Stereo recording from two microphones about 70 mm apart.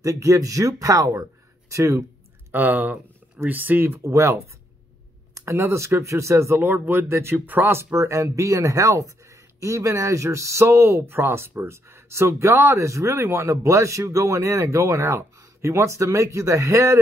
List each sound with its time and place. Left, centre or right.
0.0 s speech: right
2.5 s speech: right
7.8 s speech: right